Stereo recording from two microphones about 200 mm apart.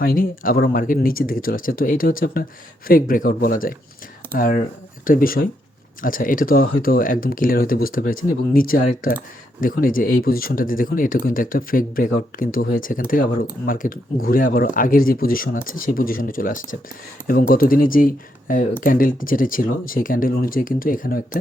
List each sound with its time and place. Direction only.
0.0 s speech: 45° left (ahead or behind)